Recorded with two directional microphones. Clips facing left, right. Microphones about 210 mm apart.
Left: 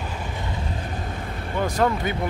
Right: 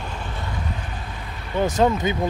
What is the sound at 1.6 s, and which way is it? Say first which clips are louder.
Speech: right 3 dB; 20° right (ahead or behind).